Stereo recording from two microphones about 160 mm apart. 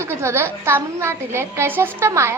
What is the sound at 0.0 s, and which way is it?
A woman's voice, 15° right (ahead or behind).